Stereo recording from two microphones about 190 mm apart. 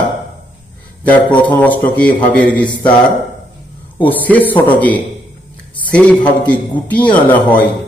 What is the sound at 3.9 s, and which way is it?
A man's voice, 10° left (ahead or behind).